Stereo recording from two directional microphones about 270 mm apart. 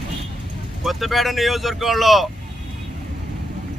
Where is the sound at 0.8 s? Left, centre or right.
Centre.